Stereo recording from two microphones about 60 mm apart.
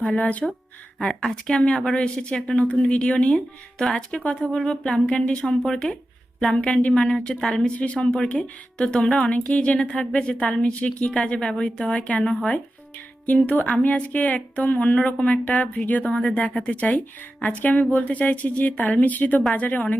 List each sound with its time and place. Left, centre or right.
0.0 s speech: centre
0.9 s a woman's voice: centre
1.5 s speech: centre
13.7 s speech: left